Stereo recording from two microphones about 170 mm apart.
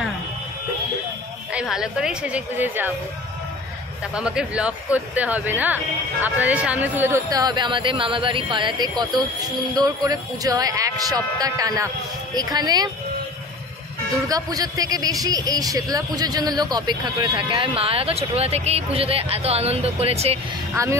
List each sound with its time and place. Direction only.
1.5 s a woman's voice: 5° right (ahead or behind)
4.1 s a woman's voice: 5° right (ahead or behind); by 12.9 s 25° right (ahead or behind)
14.3 s a man's voice: 20° right (ahead or behind); by 20.3 s 35° right (ahead or behind)
20.7 s a woman's voice: 20° right (ahead or behind)